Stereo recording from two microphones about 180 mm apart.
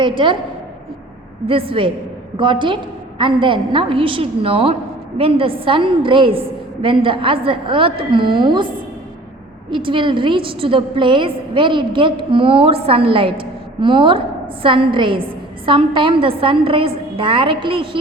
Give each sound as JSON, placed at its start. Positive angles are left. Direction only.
{"t": 0.0, "sound": "a woman's voice", "side_deg": -25}
{"t": 1.5, "sound": "a woman's voice", "side_deg": -30}